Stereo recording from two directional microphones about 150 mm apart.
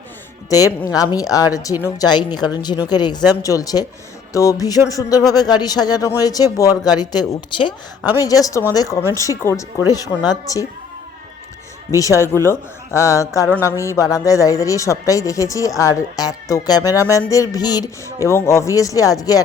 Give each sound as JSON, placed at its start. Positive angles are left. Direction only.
{"t": 0.9, "sound": "a man's voice", "side_deg": 25}
{"t": 11.9, "sound": "a man's voice", "side_deg": 20}